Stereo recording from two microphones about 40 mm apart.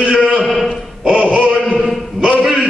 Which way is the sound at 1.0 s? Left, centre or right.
Right.